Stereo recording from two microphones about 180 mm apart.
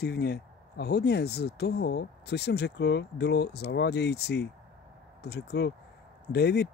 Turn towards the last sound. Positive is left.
turn(degrees=65)  # may be behind; listen again after turning